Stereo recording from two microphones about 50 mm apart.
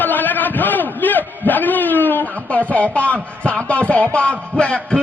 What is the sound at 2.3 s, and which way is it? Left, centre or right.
A man's voice, left.